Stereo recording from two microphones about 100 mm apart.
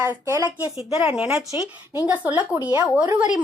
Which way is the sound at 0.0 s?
20° right (ahead or behind).